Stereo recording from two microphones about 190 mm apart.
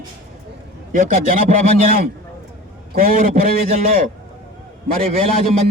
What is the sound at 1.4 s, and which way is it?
Speech, 50° right (ahead or behind).